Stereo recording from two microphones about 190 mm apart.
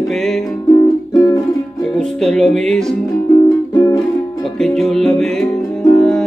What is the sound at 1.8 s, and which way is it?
Music, 5° left (ahead or behind).